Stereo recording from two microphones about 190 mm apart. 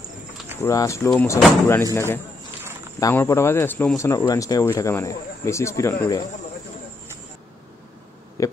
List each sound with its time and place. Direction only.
0.6 s speech: 15° left (ahead or behind)
3.0 s speech: 15° left (ahead or behind)
8.4 s speech: 15° left (ahead or behind)